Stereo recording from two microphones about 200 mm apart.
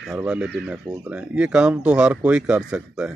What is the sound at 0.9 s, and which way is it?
Speech, 15° right (ahead or behind).